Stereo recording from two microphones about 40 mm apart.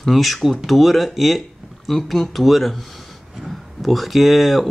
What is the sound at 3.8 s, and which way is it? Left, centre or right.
Speech, centre.